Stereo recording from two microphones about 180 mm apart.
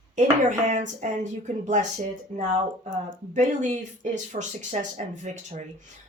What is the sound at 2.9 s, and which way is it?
Speech, 45° right (ahead or behind).